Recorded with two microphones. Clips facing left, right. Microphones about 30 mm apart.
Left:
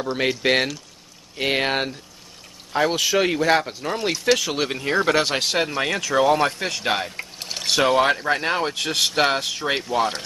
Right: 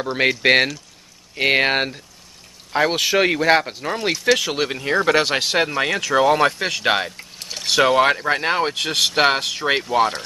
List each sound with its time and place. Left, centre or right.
0.0 s speech: centre
7.3 s boat: centre
7.6 s speech: centre